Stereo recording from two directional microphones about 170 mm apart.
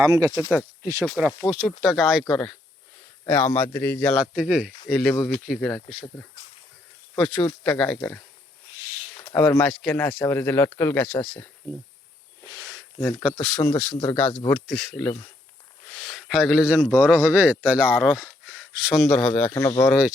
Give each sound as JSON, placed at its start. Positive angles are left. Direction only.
{"t": 0.0, "sound": "speech", "side_deg": -20}
{"t": 1.5, "sound": "a man's voice", "side_deg": -5}
{"t": 4.9, "sound": "a man's voice", "side_deg": 5}
{"t": 7.2, "sound": "a man's voice", "side_deg": 5}
{"t": 9.2, "sound": "speech", "side_deg": 10}
{"t": 12.5, "sound": "a sound", "side_deg": -20}
{"t": 13.0, "sound": "speech", "side_deg": 10}
{"t": 13.9, "sound": "speech", "side_deg": 25}
{"t": 14.2, "sound": "a man's voice", "side_deg": 5}
{"t": 19.5, "sound": "speech", "side_deg": 20}